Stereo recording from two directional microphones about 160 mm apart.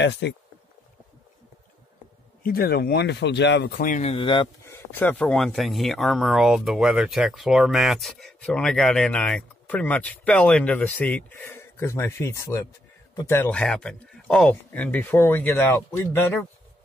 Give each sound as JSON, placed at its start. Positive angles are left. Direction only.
{"t": 0.2, "sound": "speech", "side_deg": 90}
{"t": 2.4, "sound": "speech", "side_deg": 75}
{"t": 4.1, "sound": "speech", "side_deg": 30}
{"t": 4.6, "sound": "speech", "side_deg": 15}
{"t": 5.2, "sound": "a man's voice", "side_deg": 0}